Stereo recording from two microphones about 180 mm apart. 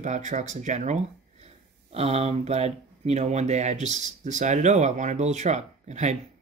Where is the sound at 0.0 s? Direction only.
40° right (ahead or behind).